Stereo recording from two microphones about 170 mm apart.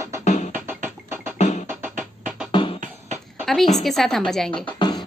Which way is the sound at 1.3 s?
45° left (ahead or behind).